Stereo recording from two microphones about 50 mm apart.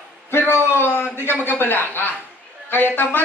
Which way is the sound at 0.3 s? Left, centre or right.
Left.